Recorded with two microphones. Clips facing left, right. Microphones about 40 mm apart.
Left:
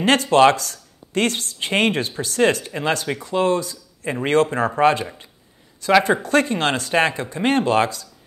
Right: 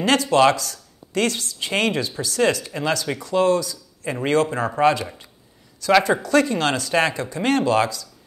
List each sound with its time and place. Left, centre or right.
0.0 s speech: left